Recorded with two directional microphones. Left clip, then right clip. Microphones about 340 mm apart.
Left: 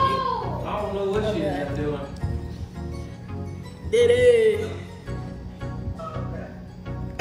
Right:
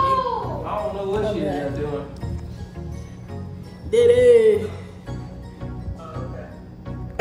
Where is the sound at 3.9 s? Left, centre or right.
Centre.